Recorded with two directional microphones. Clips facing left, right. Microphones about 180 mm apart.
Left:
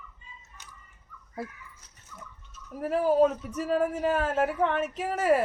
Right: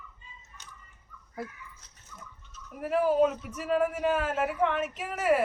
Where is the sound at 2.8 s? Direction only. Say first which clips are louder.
Left 2 dB; 35° left (ahead or behind).